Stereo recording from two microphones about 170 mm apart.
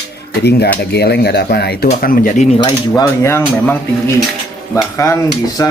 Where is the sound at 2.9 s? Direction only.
15° left (ahead or behind).